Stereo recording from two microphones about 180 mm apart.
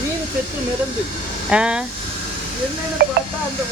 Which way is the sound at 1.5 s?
5° right (ahead or behind).